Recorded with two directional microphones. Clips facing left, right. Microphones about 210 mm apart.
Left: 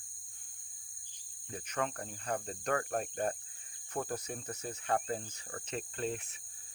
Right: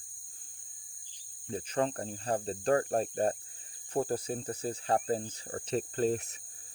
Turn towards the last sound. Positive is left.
turn(degrees=-40)  # may be behind; listen again after turning